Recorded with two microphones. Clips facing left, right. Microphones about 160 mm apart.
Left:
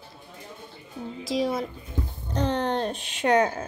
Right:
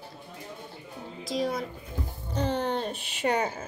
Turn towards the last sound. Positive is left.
turn(degrees=65)  # may be behind; listen again after turning